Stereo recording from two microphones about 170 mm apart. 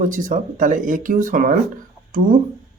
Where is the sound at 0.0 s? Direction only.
50° right (ahead or behind).